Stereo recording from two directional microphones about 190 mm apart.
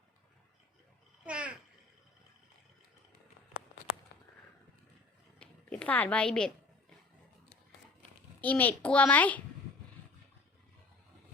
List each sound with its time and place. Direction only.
1.2 s babbling: 5° right (ahead or behind)
5.4 s a sound: 5° left (ahead or behind)
8.4 s a child's voice: 10° left (ahead or behind)